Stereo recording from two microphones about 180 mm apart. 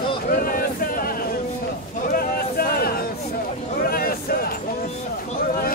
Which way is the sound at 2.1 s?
55° left (ahead or behind).